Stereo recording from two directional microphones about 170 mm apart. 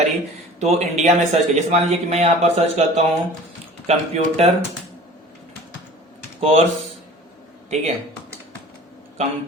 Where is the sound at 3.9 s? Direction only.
40° right (ahead or behind).